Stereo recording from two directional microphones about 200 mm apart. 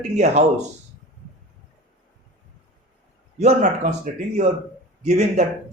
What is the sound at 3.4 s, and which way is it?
Speech, 35° right (ahead or behind).